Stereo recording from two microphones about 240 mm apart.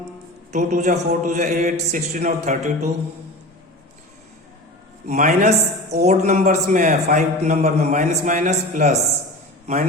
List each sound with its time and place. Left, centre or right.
0.5 s speech: right
5.0 s a man's voice: right